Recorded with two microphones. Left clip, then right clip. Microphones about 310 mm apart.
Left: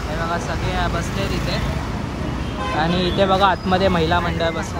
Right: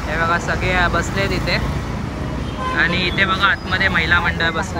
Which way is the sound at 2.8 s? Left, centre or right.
Centre.